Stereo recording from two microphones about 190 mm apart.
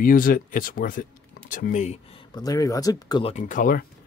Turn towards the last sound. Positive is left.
turn(degrees=45)  # may be behind; listen again after turning